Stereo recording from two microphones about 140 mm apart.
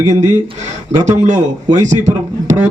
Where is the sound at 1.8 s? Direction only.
60° right (ahead or behind).